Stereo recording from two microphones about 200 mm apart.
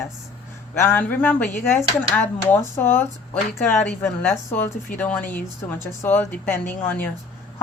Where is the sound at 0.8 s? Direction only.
10° left (ahead or behind).